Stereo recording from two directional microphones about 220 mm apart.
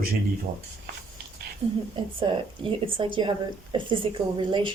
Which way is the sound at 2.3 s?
25° right (ahead or behind).